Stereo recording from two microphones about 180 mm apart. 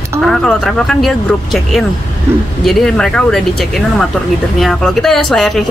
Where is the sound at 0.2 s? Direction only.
Centre (ahead or behind).